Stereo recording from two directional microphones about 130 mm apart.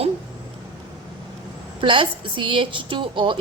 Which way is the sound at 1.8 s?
40° right (ahead or behind).